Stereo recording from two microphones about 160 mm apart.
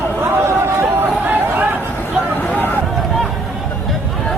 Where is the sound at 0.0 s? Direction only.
15° right (ahead or behind).